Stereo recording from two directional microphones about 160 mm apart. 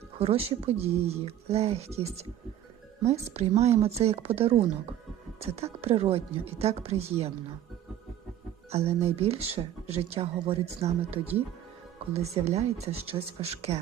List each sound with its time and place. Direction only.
0.2 s speech: 40° right (ahead or behind)
8.7 s speech: 40° right (ahead or behind)
11.1 s speech: 10° right (ahead or behind)
12.1 s speech: 40° right (ahead or behind)